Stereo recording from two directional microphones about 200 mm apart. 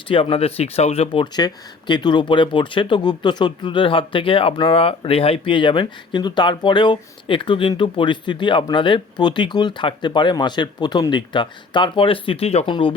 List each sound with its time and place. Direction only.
0.1 s speech: 30° left (ahead or behind)